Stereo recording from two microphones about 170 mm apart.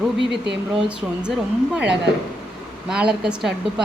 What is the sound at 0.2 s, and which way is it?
Speech, 90° right.